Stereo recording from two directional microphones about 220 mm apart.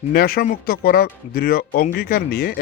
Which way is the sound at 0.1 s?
45° left (ahead or behind).